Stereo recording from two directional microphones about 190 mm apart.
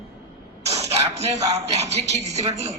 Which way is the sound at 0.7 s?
35° right (ahead or behind).